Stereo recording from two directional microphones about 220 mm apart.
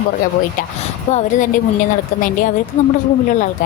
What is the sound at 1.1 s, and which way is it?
Speech, 35° left (ahead or behind).